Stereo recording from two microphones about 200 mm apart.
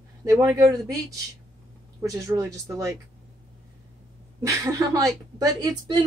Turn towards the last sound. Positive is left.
turn(degrees=-20)  # may be behind; listen again after turning